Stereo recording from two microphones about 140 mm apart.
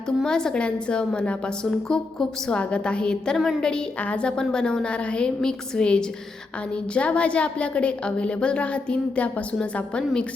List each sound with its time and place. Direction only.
0.2 s a woman's voice: 5° left (ahead or behind)